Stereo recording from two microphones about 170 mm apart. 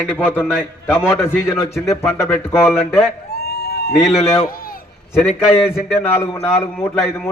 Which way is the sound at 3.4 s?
70° left (ahead or behind).